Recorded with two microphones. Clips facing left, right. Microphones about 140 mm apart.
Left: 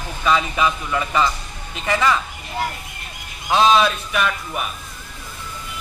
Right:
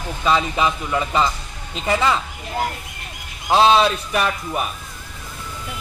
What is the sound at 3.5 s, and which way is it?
A man's voice, 30° right (ahead or behind).